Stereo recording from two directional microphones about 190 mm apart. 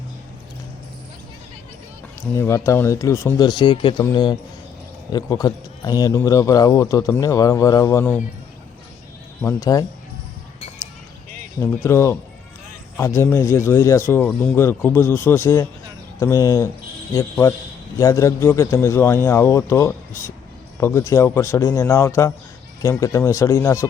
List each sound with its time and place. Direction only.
2.3 s a man's voice: 15° left (ahead or behind)
9.4 s a man's voice: 15° left (ahead or behind)
11.6 s a man's voice: 15° left (ahead or behind)